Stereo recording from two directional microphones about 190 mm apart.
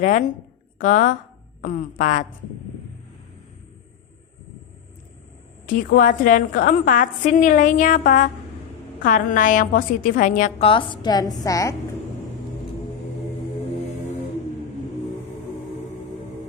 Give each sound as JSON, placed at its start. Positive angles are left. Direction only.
{"t": 0.0, "sound": "a woman's voice", "side_deg": 45}
{"t": 5.6, "sound": "a woman's voice", "side_deg": 45}
{"t": 10.7, "sound": "a woman's voice", "side_deg": 25}